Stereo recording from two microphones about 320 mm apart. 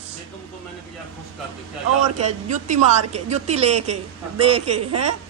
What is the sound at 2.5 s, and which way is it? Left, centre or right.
Speech, right.